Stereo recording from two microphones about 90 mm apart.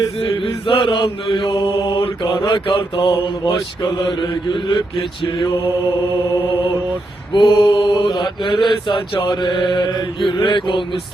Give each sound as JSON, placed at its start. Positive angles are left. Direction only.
{"t": 0.2, "sound": "mantra", "side_deg": 70}
{"t": 7.3, "sound": "mantra", "side_deg": 60}